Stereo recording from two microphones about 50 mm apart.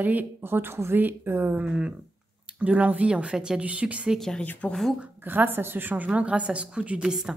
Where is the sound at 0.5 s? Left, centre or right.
Right.